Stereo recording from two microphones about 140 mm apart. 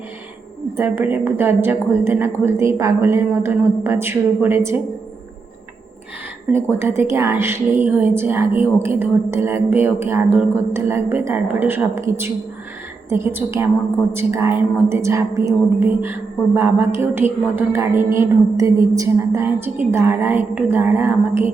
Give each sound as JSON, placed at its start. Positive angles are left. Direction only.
{"t": 0.8, "sound": "a woman's voice", "side_deg": -15}
{"t": 6.5, "sound": "a woman's voice", "side_deg": -15}